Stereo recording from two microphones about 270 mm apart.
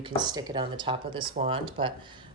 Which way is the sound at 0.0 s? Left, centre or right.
Centre.